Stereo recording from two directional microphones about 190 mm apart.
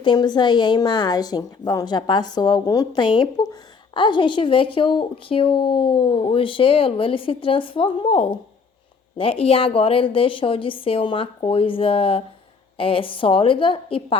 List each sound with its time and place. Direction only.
0.0 s speech: 25° left (ahead or behind)